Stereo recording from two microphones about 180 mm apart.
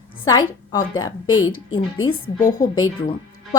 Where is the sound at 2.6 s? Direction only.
20° left (ahead or behind).